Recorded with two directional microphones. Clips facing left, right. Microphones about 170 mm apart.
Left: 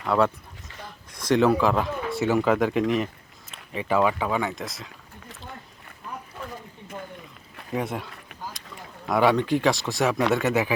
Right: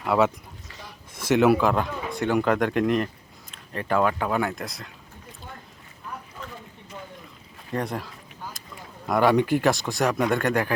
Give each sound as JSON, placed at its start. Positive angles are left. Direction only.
{"t": 0.0, "sound": "speech", "side_deg": -5}
{"t": 1.3, "sound": "speech", "side_deg": -5}
{"t": 7.7, "sound": "speech", "side_deg": 5}